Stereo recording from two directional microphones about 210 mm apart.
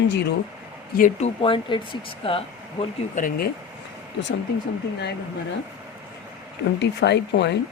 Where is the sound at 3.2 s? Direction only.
40° left (ahead or behind).